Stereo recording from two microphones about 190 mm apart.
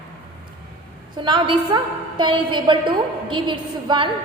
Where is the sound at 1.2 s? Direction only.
25° right (ahead or behind).